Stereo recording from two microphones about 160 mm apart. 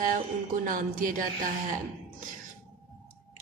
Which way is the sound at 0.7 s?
55° right (ahead or behind).